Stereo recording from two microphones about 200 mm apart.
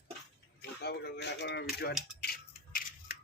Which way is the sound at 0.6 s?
55° left (ahead or behind).